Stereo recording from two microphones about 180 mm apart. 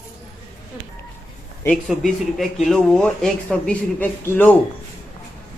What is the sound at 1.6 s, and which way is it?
A man's voice, centre (ahead or behind).